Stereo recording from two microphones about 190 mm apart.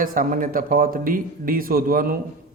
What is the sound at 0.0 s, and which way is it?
A man's voice, 45° right (ahead or behind).